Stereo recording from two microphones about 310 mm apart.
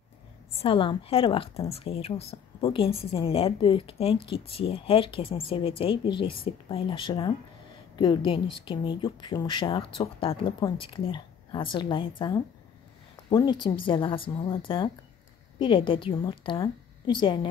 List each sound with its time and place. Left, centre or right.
0.6 s a woman's voice: centre
13.1 s speech: centre